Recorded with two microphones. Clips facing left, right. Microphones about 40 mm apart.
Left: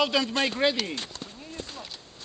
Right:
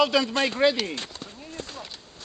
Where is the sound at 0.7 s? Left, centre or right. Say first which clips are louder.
Right 2 dB; centre.